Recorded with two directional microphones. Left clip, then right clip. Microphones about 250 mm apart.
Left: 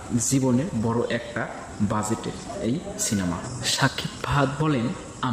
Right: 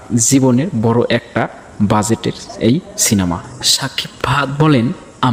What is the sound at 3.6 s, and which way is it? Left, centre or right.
Speech, centre.